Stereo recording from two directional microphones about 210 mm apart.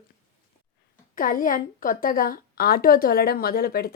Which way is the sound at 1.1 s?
40° left (ahead or behind).